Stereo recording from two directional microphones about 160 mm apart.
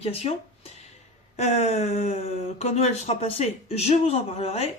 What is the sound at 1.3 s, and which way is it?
Speech, 45° left (ahead or behind).